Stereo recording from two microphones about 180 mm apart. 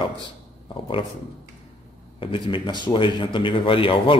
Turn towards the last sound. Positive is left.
turn(degrees=30)  # may be behind; listen again after turning